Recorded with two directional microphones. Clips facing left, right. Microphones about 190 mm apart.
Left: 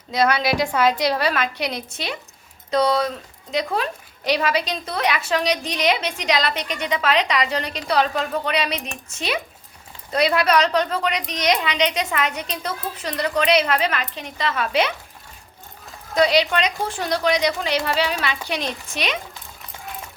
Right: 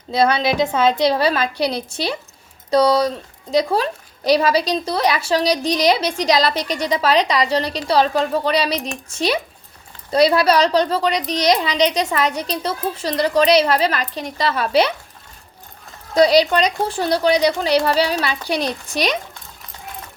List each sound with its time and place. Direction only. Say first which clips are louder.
0.1 s a woman's voice: right 3 dB; 30° right (ahead or behind)
16.1 s speech: right 5 dB; 35° right (ahead or behind)